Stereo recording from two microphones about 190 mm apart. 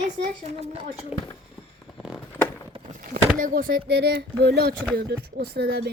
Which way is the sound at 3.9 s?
60° right (ahead or behind).